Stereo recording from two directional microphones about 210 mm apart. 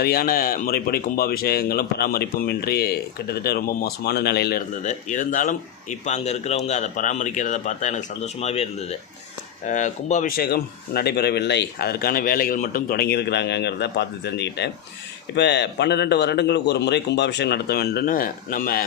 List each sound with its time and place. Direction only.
0.0 s speech: 45° left (ahead or behind)